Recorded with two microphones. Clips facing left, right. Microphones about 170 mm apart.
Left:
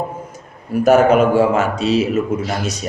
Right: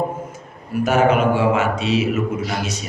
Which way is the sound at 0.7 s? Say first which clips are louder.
Left 5 dB; 40° left (ahead or behind).